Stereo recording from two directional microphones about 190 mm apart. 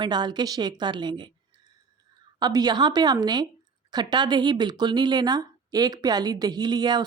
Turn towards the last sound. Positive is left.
turn(degrees=-20)  # may be behind; listen again after turning